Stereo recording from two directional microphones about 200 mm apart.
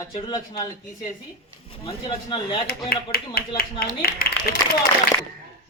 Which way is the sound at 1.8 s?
25° left (ahead or behind).